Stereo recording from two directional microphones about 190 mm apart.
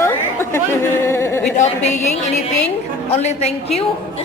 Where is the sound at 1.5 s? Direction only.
35° left (ahead or behind).